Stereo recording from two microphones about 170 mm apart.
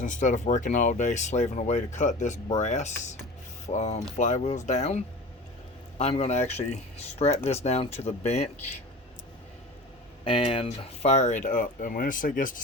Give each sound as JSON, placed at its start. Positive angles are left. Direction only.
{"t": 0.0, "sound": "speech", "side_deg": 45}
{"t": 10.2, "sound": "speech", "side_deg": 30}